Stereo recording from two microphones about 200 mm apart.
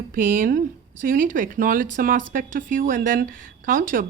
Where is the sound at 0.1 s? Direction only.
45° right (ahead or behind).